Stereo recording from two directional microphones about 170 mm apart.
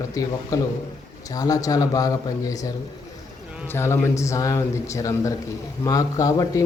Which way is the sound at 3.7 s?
15° left (ahead or behind).